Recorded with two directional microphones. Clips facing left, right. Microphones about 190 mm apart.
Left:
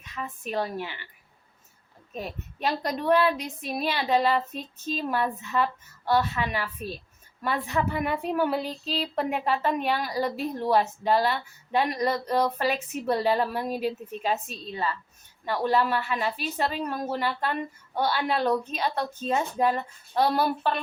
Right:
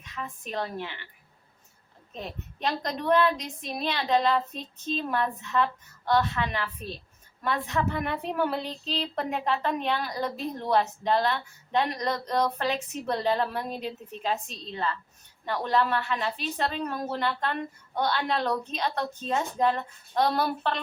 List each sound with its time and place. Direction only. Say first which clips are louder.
0.2 s a woman's voice: left 3 dB; 10° left (ahead or behind)
2.1 s a woman's voice: left 3 dB; 5° left (ahead or behind)